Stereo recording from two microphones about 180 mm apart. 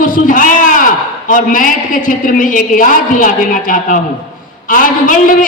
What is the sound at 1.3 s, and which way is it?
A woman's voice, 50° left (ahead or behind).